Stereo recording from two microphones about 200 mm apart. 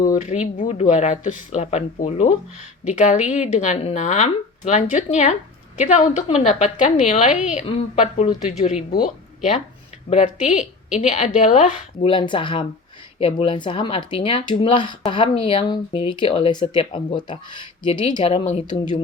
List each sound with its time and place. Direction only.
0.0 s a woman's voice: 40° left (ahead or behind)
18.6 s speech: 20° left (ahead or behind)